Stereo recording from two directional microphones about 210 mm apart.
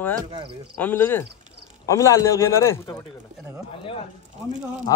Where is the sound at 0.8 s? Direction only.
10° left (ahead or behind).